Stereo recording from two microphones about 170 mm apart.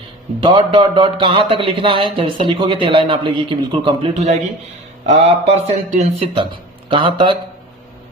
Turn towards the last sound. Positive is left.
turn(degrees=-30)  # may be behind; listen again after turning